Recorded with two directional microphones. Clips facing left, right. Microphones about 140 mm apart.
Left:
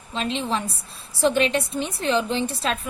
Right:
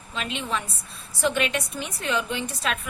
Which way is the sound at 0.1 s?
30° left (ahead or behind).